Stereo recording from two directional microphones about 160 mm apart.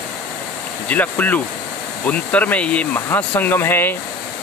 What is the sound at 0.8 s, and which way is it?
Speech, 10° left (ahead or behind).